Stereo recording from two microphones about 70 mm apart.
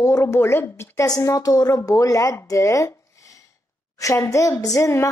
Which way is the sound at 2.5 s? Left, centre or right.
Left.